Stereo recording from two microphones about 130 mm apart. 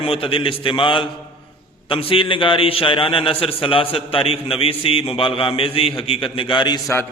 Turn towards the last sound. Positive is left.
turn(degrees=35)  # may be behind; listen again after turning